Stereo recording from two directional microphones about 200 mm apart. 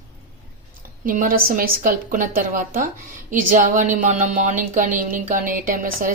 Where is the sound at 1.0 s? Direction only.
45° right (ahead or behind).